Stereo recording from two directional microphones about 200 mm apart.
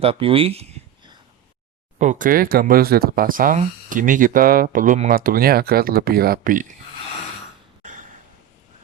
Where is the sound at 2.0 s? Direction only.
40° right (ahead or behind).